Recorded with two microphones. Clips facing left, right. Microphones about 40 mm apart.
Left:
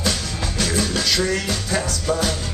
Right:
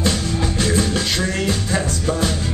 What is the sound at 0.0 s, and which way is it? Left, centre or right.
Music, right.